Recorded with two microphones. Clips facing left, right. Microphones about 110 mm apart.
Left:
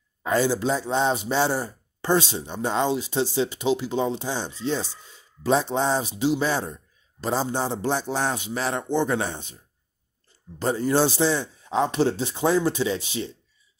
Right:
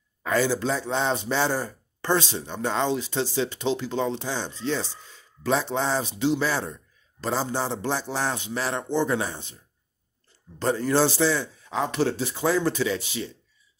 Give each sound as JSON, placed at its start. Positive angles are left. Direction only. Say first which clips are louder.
{"t": 0.2, "sound": "speech", "louder": "left 1 dB", "side_deg": 20}
{"t": 10.6, "sound": "speech", "louder": "left 1 dB", "side_deg": 15}